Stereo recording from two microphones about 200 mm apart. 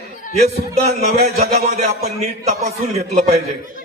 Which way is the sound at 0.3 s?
35° right (ahead or behind).